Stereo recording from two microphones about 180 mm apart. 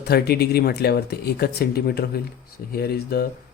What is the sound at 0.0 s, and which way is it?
Speech, 65° left (ahead or behind).